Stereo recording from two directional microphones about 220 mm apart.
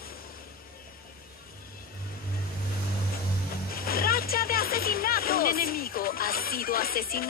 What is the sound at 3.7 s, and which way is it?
Music, 40° left (ahead or behind).